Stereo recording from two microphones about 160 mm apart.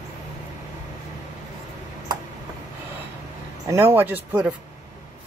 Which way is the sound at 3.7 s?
15° right (ahead or behind).